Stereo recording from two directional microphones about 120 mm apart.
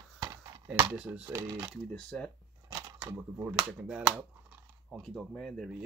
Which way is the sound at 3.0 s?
20° right (ahead or behind).